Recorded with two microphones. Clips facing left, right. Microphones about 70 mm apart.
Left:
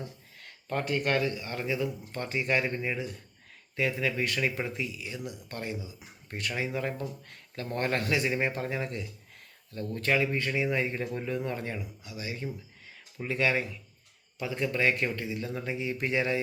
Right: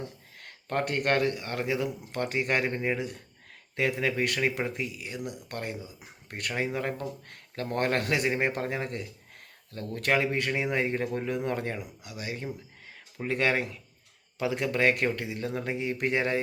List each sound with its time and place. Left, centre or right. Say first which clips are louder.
0.3 s speech: right 3 dB; right
3.8 s speech: right 2 dB; right
11.3 s speech: right 3 dB; right
14.3 s speech: right 3 dB; right